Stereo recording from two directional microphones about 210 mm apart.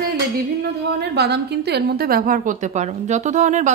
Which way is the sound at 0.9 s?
50° right (ahead or behind).